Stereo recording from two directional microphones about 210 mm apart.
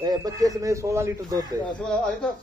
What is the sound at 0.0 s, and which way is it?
A man's voice, 15° right (ahead or behind).